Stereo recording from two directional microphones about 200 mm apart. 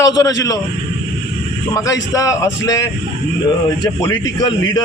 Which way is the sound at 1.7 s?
15° left (ahead or behind).